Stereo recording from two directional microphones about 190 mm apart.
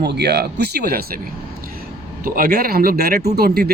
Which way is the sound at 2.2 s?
50° right (ahead or behind).